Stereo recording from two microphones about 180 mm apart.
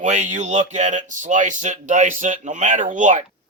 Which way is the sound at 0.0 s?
40° right (ahead or behind).